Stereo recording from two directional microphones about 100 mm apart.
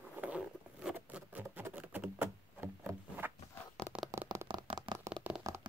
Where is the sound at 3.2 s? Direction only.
20° right (ahead or behind).